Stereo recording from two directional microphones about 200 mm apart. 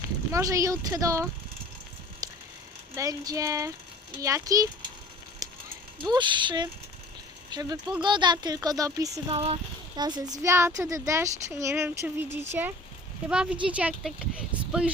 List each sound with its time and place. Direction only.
0.3 s speech: 15° right (ahead or behind)
2.2 s a sound: 20° right (ahead or behind)
2.9 s speech: 15° right (ahead or behind)
5.4 s horse: 15° right (ahead or behind)
6.1 s speech: 25° right (ahead or behind)
9.3 s speech: 30° right (ahead or behind); by 14.9 s 5° right (ahead or behind)